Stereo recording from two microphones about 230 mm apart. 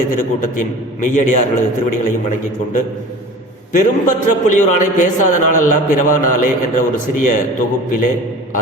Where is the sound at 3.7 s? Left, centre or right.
Left.